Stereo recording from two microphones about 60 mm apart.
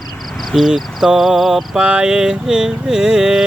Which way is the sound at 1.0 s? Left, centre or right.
Centre.